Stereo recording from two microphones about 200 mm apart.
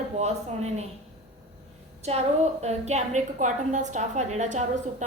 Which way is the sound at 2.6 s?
35° right (ahead or behind).